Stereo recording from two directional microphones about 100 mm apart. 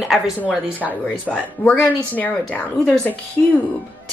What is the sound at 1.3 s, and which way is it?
A woman's voice, 15° left (ahead or behind).